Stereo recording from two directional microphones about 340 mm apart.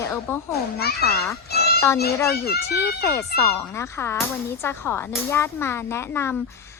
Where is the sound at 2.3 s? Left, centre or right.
Left.